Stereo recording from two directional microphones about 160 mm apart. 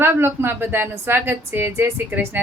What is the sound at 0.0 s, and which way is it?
A woman's voice, 15° right (ahead or behind).